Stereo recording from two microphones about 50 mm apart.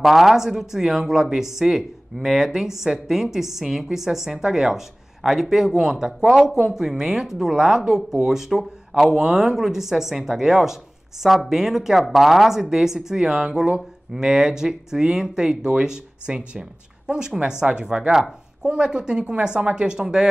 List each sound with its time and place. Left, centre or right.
0.0 s speech: centre